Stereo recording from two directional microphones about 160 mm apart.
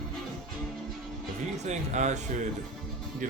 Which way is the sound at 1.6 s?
45° right (ahead or behind).